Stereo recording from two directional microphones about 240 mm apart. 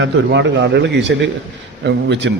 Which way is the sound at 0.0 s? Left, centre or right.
Right.